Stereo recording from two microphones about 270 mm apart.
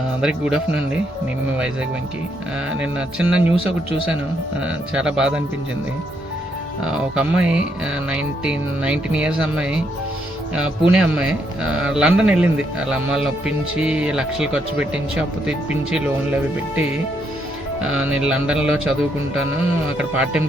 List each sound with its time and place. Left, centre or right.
0.2 s speech: centre
2.8 s speech: centre
4.6 s speech: centre
6.8 s speech: centre
17.7 s speech: centre
20.0 s speech: centre